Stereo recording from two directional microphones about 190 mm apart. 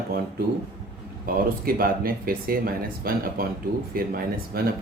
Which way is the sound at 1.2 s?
50° right (ahead or behind).